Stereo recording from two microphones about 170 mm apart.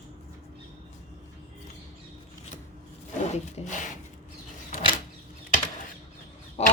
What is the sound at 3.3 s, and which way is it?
Speech, 45° left (ahead or behind).